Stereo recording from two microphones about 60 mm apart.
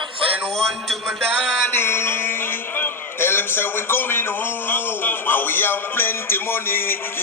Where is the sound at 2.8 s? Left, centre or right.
Left.